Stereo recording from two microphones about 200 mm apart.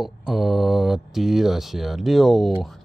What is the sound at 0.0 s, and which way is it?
Speech, centre (ahead or behind).